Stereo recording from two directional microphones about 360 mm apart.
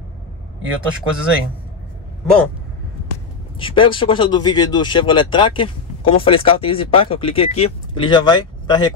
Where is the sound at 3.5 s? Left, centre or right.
Centre.